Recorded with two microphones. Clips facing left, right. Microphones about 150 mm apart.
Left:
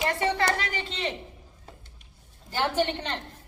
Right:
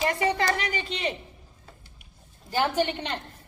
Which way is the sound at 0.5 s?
15° right (ahead or behind).